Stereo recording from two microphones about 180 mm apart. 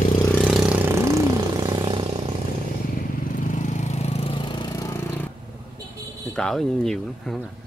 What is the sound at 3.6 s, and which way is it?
Vehicle, 45° left (ahead or behind).